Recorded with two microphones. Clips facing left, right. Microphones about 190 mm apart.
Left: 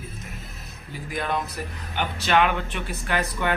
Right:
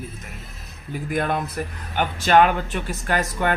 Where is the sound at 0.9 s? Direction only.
50° right (ahead or behind).